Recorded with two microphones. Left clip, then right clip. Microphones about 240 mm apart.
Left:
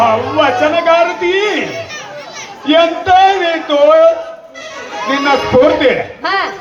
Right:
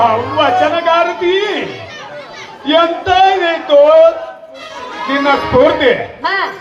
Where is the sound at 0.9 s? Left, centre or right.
Right.